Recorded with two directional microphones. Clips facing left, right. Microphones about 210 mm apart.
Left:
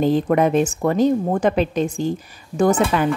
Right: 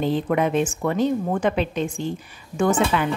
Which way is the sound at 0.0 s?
40° left (ahead or behind).